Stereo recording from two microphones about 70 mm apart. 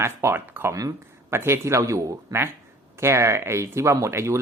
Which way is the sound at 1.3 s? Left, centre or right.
Right.